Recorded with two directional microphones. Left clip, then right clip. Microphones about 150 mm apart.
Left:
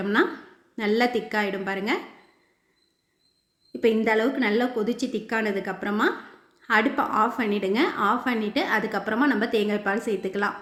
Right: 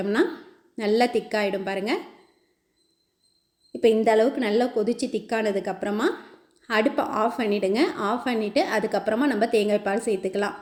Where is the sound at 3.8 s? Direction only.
20° right (ahead or behind).